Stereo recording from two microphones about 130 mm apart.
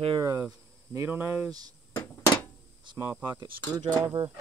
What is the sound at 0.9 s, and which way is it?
Speech, 15° right (ahead or behind).